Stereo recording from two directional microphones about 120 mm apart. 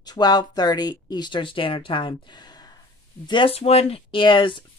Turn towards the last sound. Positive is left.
turn(degrees=40)  # may be behind; listen again after turning